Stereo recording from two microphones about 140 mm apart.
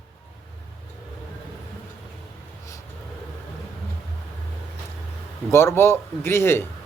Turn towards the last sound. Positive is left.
turn(degrees=20)  # may be behind; listen again after turning